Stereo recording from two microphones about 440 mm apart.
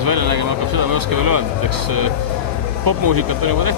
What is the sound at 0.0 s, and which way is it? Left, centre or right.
Speech, right.